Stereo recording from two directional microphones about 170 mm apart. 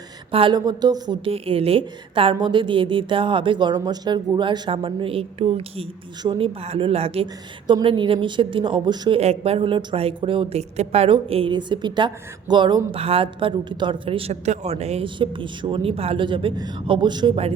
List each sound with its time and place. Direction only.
0.3 s a woman's voice: 30° right (ahead or behind)